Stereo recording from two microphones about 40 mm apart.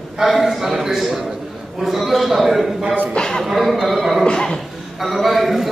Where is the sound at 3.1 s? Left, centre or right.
Centre.